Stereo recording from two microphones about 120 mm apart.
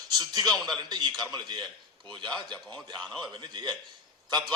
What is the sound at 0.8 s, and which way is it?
Speech, 35° right (ahead or behind).